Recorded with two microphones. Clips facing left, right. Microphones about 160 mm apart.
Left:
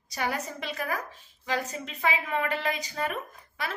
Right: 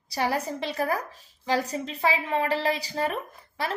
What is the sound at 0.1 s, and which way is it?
A woman's voice, 30° right (ahead or behind).